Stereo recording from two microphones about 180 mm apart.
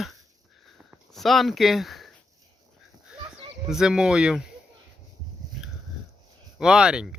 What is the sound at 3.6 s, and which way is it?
Speech, 5° right (ahead or behind).